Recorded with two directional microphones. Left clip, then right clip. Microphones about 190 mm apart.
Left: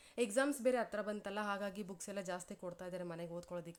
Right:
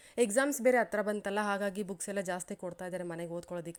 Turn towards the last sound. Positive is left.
turn(degrees=-25)  # may be behind; listen again after turning